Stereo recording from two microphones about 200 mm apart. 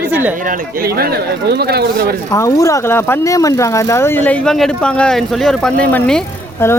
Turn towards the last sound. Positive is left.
turn(degrees=10)  # may be behind; listen again after turning